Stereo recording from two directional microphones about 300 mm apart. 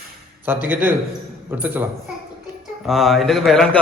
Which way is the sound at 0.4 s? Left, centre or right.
Centre.